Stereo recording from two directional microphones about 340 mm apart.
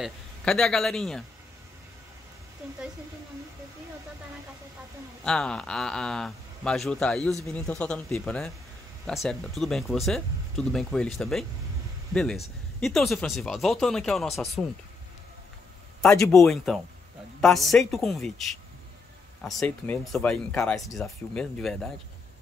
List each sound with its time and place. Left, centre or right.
0.0 s speech: centre
5.2 s speech: centre
16.0 s speech: centre
19.4 s speech: centre